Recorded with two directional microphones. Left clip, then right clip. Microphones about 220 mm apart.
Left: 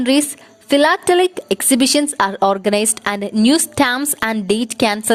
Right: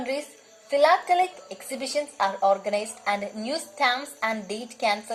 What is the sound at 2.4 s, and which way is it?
Speech, 50° left (ahead or behind).